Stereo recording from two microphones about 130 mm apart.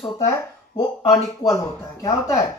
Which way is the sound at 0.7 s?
30° left (ahead or behind).